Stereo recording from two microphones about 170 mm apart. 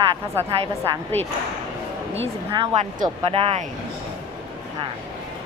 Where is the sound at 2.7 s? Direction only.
40° right (ahead or behind).